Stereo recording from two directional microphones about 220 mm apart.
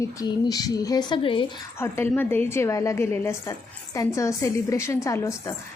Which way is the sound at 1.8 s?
10° left (ahead or behind).